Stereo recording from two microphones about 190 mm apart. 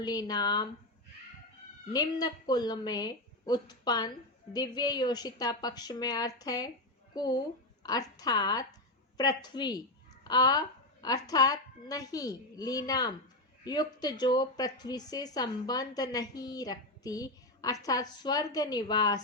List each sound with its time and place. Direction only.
0.0 s a woman's voice: 20° left (ahead or behind)
1.9 s a woman's voice: 20° left (ahead or behind)